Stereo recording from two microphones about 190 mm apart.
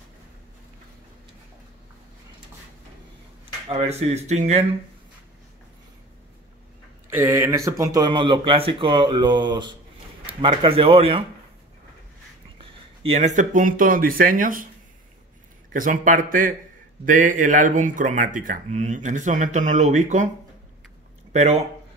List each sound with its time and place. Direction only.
3.6 s speech: 35° right (ahead or behind)
7.1 s speech: 10° right (ahead or behind); by 11.2 s 30° right (ahead or behind)
12.5 s speech: 30° right (ahead or behind); by 14.7 s 45° right (ahead or behind)
15.7 s a man's voice: 45° right (ahead or behind)
21.3 s speech: 35° right (ahead or behind)